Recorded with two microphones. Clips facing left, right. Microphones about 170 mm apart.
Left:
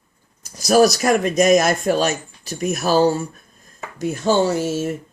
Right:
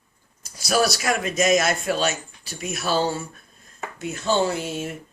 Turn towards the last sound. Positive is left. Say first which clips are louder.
# left 5 dB
turn(degrees=40)  # may be behind; listen again after turning